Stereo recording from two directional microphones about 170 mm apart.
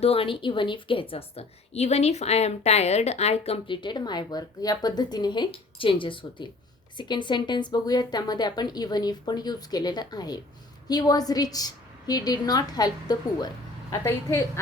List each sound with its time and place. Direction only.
0.0 s a woman's voice: 35° left (ahead or behind); by 14.6 s 15° left (ahead or behind)